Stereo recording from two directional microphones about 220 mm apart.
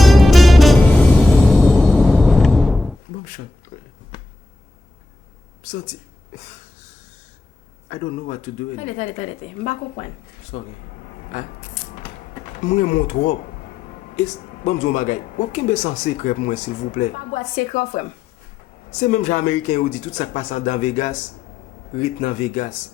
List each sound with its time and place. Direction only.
0.0 s music: centre (ahead or behind)
3.7 s a sound: 35° left (ahead or behind)
4.1 s a sound: 20° left (ahead or behind)
7.9 s speech: 35° left (ahead or behind)
10.5 s speech: 30° left (ahead or behind)
13.0 s speech: 30° left (ahead or behind)